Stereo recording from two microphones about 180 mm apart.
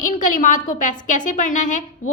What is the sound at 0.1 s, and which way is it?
A woman's voice, 50° left (ahead or behind).